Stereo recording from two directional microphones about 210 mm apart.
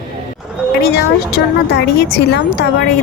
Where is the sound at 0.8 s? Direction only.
55° left (ahead or behind).